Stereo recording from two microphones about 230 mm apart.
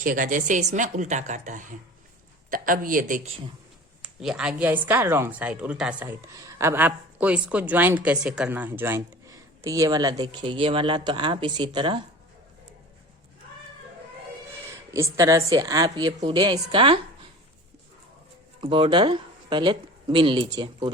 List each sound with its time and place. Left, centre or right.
0.0 s a woman's voice: right
4.0 s speech: centre; by 12.0 s right
14.9 s speech: centre
18.6 s speech: right